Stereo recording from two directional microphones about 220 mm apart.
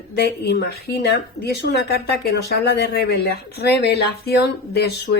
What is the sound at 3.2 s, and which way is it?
A woman's voice, 45° left (ahead or behind).